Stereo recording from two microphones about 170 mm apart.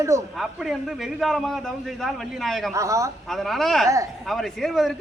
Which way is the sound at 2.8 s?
20° right (ahead or behind).